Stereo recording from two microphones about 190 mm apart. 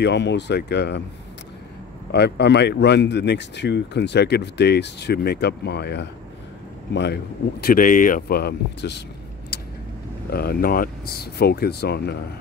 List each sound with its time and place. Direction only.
0.0 s speech: 65° left (ahead or behind)
2.1 s speech: 60° left (ahead or behind)
7.6 s speech: 45° left (ahead or behind)
10.3 s speech: 50° left (ahead or behind)